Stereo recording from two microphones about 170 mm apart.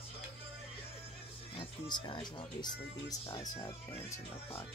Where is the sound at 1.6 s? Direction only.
30° left (ahead or behind).